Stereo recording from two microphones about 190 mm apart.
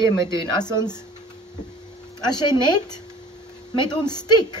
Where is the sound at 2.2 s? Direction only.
20° left (ahead or behind).